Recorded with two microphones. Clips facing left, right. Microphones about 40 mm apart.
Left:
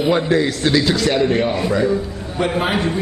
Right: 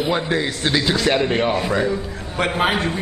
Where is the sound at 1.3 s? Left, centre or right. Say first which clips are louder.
Left 1 dB; right.